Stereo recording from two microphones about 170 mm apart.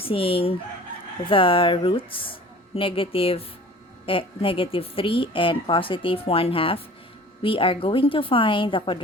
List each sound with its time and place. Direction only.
0.0 s speech: 35° left (ahead or behind)